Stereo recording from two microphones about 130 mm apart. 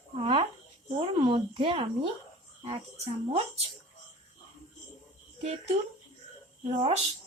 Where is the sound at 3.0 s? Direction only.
50° right (ahead or behind).